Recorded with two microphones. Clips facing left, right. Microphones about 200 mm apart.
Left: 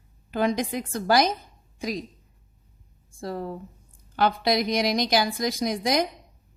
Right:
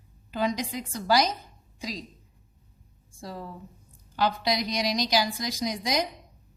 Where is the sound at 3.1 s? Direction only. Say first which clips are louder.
Left 7 dB; 55° left (ahead or behind).